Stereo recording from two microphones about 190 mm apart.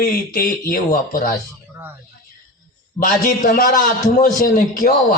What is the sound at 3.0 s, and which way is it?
A man's voice, 45° left (ahead or behind).